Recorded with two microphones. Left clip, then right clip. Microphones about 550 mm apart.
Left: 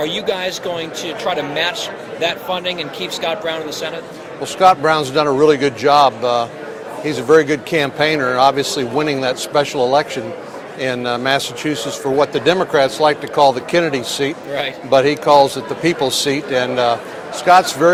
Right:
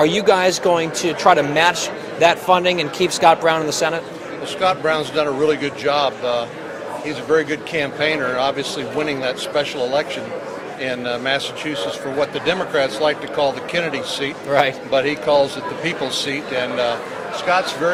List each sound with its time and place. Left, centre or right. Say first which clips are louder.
0.0 s speech: right 5 dB; right
4.6 s a man's voice: left 6 dB; left